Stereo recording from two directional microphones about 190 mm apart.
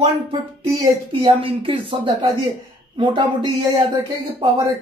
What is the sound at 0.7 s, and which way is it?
Speech, 15° right (ahead or behind).